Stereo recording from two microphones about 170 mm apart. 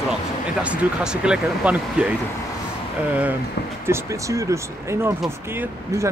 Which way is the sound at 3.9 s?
20° right (ahead or behind).